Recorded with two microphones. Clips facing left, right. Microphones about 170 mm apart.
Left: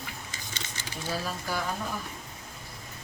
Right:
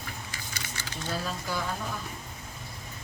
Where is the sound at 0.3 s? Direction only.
20° left (ahead or behind).